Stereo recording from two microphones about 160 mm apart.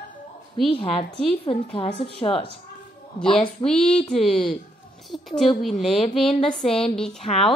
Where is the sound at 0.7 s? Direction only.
35° left (ahead or behind).